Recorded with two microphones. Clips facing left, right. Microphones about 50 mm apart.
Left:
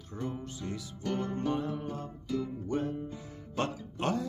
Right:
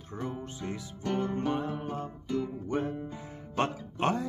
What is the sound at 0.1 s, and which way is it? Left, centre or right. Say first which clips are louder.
Music: right 1 dB; right.